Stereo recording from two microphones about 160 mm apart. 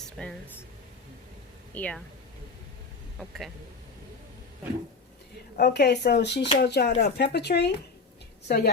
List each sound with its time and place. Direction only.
0.0 s a sound: 5° left (ahead or behind)
1.7 s speech: 10° left (ahead or behind)
3.2 s speech: centre (ahead or behind)
5.5 s speech: 80° left